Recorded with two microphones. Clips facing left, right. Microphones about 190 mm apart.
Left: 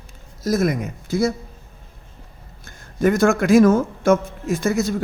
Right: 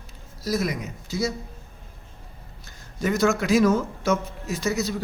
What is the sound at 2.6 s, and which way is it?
A man's voice, 50° left (ahead or behind).